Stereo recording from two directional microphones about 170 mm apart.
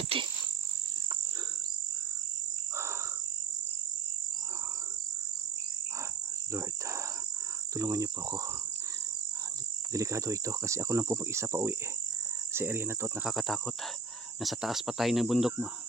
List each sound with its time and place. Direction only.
0.1 s insect: 35° right (ahead or behind)
2.7 s bird: 15° right (ahead or behind)
6.5 s cricket: 15° right (ahead or behind)
7.7 s speech: 20° right (ahead or behind)
9.9 s cricket: 20° right (ahead or behind)
13.3 s cricket: centre (ahead or behind)